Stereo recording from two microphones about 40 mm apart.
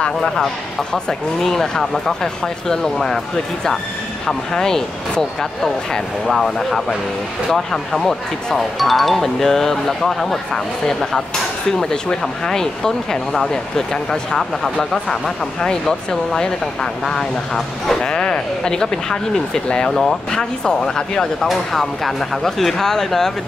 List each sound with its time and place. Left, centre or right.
1.4 s speech: centre
4.3 s speech: centre
18.0 s speech: left
21.5 s speech: centre